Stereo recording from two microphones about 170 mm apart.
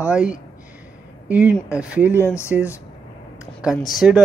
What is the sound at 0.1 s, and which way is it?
Speech, 5° right (ahead or behind).